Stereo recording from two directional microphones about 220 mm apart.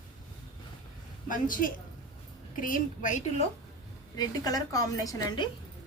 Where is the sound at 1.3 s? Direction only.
40° left (ahead or behind).